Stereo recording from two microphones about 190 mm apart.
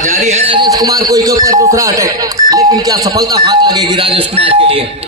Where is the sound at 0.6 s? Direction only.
20° right (ahead or behind).